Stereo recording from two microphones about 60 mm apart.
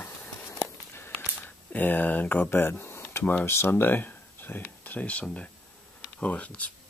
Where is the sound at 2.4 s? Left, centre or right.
Left.